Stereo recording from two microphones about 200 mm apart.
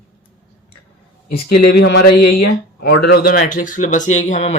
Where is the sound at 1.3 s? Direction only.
55° left (ahead or behind).